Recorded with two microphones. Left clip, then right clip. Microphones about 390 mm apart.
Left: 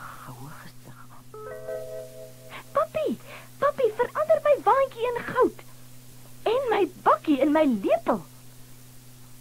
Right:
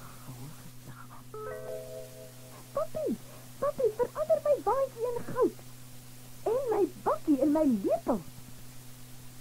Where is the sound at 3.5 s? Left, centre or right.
Left.